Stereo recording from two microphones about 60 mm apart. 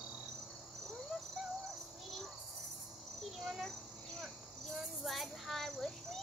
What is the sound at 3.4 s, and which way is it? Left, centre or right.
Cricket, centre.